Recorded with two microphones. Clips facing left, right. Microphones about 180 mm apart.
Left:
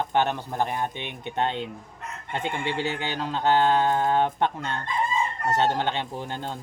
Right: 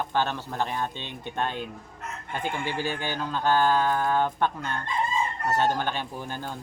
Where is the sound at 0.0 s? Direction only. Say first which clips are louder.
Left 3 dB; 20° left (ahead or behind).